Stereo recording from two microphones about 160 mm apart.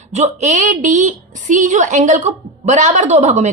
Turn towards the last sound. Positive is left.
turn(degrees=-45)  # may be behind; listen again after turning